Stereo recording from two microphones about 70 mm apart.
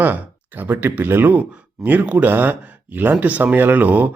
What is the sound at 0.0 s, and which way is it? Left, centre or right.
Speech, right.